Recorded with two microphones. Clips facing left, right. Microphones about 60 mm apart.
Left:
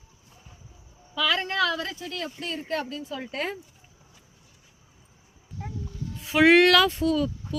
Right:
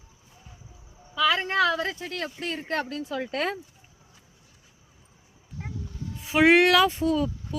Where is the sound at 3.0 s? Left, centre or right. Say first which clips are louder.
Right 3 dB; right.